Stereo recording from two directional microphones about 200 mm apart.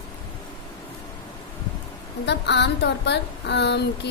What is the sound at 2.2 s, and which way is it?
A woman's voice, 60° left (ahead or behind).